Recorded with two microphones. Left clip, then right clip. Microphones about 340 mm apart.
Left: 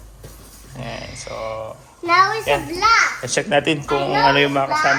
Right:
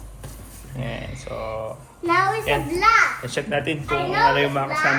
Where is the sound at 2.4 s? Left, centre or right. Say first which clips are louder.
Left 1 dB; centre.